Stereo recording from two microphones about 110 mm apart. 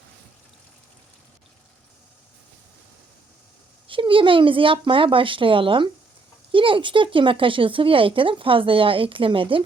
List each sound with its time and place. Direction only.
3.8 s speech: 50° right (ahead or behind)